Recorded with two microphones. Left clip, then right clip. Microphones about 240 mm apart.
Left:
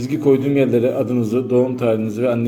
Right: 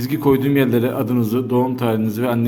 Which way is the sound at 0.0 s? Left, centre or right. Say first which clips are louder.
Left 1 dB; right.